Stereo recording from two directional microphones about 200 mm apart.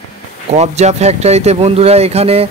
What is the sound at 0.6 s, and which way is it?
Speech, 35° right (ahead or behind).